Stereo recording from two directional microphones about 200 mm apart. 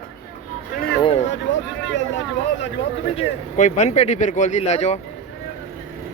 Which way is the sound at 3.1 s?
35° left (ahead or behind).